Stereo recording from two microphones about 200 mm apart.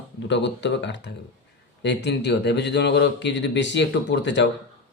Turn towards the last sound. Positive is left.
turn(degrees=60)  # may be behind; listen again after turning